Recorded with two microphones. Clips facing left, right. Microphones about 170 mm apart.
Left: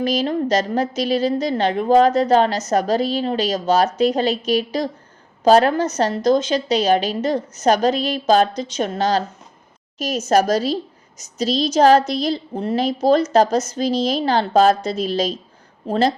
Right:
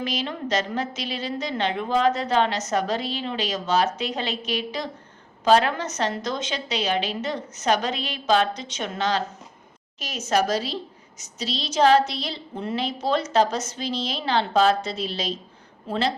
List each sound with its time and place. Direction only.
0.0 s a woman's voice: 40° left (ahead or behind)